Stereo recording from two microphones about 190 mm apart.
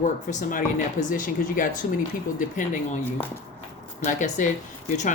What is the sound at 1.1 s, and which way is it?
Speech, 45° left (ahead or behind).